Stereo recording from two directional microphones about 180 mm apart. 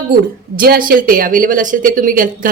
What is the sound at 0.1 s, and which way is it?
A woman's voice, 55° right (ahead or behind).